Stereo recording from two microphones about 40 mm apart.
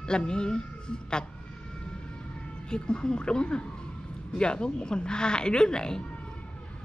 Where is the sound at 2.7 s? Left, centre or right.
Left.